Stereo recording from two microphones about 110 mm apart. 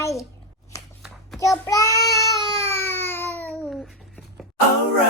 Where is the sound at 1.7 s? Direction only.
30° left (ahead or behind).